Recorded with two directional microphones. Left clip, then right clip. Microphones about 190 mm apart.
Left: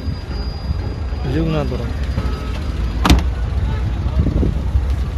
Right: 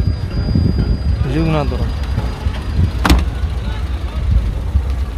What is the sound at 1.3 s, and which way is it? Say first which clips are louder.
Speech: right 3 dB; 15° right (ahead or behind).